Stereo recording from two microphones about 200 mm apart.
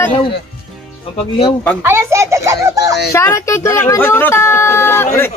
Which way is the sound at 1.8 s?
15° right (ahead or behind).